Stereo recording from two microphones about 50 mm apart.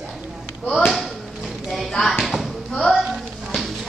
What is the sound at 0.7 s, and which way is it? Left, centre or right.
Speech, centre.